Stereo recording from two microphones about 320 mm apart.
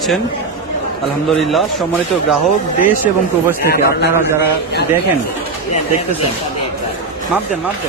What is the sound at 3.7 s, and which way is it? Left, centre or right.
Speech, left.